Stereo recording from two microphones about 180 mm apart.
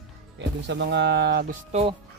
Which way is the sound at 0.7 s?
70° right (ahead or behind).